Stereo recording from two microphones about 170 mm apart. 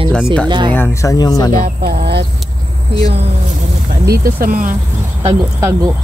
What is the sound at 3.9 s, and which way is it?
Speech, 60° right (ahead or behind).